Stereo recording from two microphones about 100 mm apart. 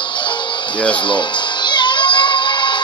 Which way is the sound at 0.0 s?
50° left (ahead or behind).